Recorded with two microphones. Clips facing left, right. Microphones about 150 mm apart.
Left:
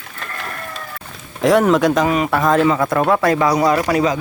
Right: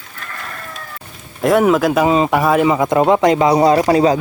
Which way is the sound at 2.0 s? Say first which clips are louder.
Right 3 dB; 20° right (ahead or behind).